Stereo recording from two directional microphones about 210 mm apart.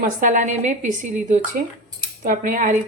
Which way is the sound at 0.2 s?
35° right (ahead or behind).